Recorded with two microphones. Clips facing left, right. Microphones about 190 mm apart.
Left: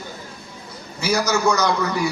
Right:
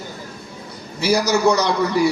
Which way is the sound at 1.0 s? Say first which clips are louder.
Right 3 dB; 35° right (ahead or behind).